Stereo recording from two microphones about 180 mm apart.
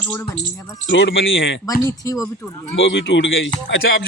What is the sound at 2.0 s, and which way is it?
Speech, 20° left (ahead or behind).